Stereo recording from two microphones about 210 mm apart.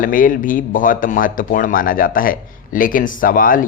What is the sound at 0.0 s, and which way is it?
Speech, 40° left (ahead or behind).